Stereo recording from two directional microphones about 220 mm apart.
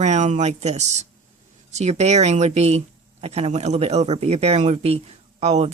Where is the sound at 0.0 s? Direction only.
30° right (ahead or behind).